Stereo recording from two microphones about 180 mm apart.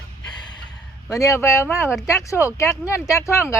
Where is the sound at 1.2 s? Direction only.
15° left (ahead or behind).